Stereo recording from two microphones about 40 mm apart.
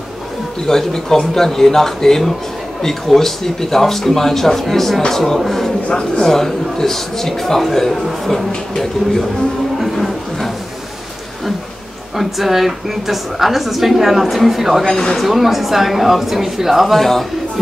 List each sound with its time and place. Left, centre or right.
0.7 s a woman's voice: centre
9.9 s a sound: centre
12.2 s a woman's voice: centre
14.9 s speech: centre
15.1 s a woman's voice: centre